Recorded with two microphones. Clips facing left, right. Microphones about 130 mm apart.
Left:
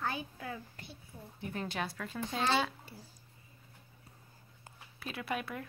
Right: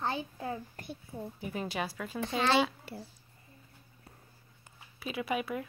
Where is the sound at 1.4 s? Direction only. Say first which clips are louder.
Right 1 dB; 5° right (ahead or behind).